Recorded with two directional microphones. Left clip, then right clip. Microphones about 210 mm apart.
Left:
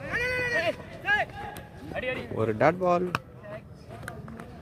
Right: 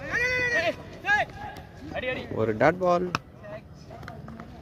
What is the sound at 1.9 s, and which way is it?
Speech, centre (ahead or behind).